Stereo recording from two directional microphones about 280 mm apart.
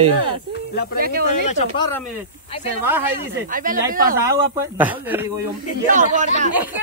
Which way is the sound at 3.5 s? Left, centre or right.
Right.